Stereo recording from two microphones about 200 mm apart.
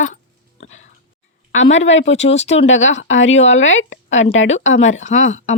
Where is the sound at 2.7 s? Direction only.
70° left (ahead or behind).